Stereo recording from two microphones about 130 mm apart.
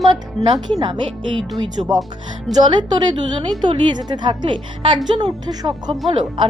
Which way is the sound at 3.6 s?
35° right (ahead or behind).